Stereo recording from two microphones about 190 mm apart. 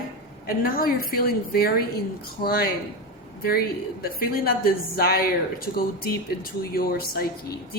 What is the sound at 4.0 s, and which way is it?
Speech, 50° left (ahead or behind).